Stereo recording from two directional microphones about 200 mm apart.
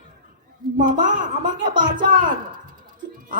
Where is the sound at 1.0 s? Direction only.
40° right (ahead or behind).